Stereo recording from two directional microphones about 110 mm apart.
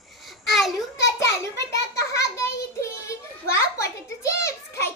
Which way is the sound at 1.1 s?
30° left (ahead or behind).